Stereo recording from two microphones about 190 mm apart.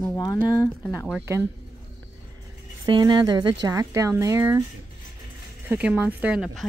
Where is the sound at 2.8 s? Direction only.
20° right (ahead or behind).